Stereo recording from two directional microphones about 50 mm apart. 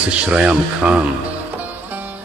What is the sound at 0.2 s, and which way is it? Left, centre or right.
Speech, right.